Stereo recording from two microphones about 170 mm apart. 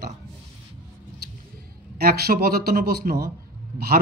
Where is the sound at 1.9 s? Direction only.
60° right (ahead or behind).